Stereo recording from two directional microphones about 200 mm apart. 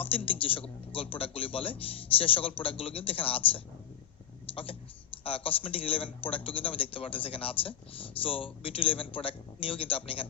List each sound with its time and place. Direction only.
0.0 s a man's voice: 25° left (ahead or behind)